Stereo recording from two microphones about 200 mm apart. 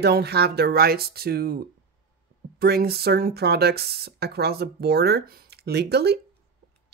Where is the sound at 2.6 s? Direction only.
50° right (ahead or behind).